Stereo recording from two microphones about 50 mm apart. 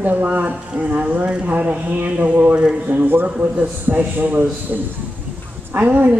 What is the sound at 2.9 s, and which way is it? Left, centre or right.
A man's voice, right.